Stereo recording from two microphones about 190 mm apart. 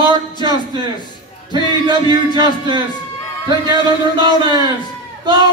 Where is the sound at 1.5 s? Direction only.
25° right (ahead or behind).